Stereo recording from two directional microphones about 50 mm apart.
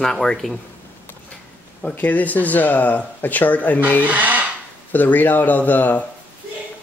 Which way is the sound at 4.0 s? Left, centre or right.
Right.